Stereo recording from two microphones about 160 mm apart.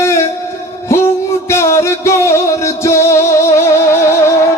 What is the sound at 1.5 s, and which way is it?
Music, 15° left (ahead or behind).